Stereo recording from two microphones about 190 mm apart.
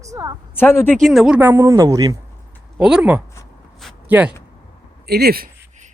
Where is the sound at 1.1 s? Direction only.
5° right (ahead or behind).